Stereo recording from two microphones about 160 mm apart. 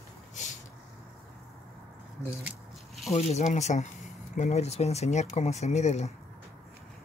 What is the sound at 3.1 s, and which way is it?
Speech, 45° left (ahead or behind).